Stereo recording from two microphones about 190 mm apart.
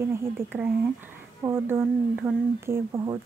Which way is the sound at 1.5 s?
10° right (ahead or behind).